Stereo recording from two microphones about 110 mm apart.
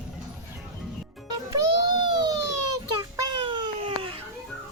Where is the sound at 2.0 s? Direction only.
40° right (ahead or behind).